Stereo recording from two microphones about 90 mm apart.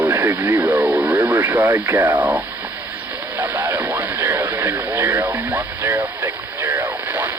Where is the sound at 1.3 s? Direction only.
20° right (ahead or behind).